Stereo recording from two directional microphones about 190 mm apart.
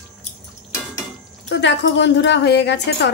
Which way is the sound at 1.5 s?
65° left (ahead or behind).